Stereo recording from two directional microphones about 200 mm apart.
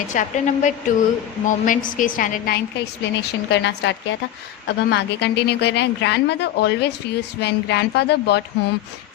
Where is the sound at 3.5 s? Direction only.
60° left (ahead or behind).